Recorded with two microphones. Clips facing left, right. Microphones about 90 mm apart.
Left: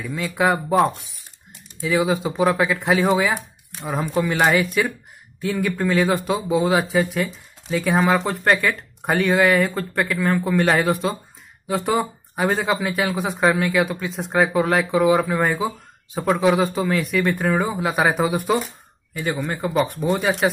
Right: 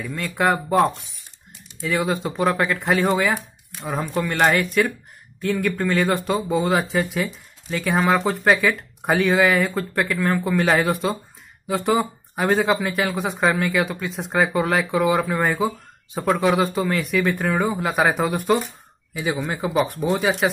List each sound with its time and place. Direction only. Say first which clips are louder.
0.0 s speech: left 1 dB; 5° left (ahead or behind)